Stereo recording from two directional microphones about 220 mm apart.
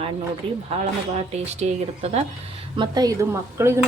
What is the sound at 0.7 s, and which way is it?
A woman's voice, 25° right (ahead or behind).